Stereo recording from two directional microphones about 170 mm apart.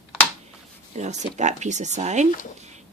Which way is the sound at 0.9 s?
45° right (ahead or behind).